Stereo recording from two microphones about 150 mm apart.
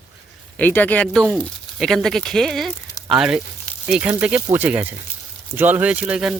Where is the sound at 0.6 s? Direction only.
10° left (ahead or behind).